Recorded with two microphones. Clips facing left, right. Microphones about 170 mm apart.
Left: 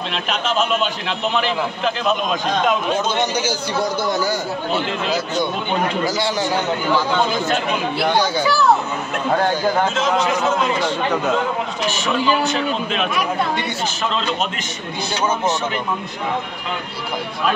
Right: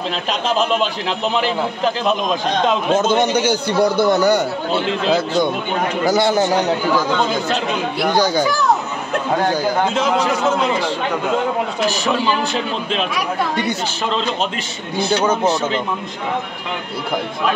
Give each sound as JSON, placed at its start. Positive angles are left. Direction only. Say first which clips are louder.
{"t": 0.1, "sound": "a man's voice", "louder": "right 1 dB", "side_deg": -35}
{"t": 2.9, "sound": "a man's voice", "louder": "right 5 dB", "side_deg": -55}
{"t": 6.0, "sound": "a man's voice", "louder": "right 5 dB", "side_deg": -55}
{"t": 11.9, "sound": "a man's voice", "louder": "even", "side_deg": -35}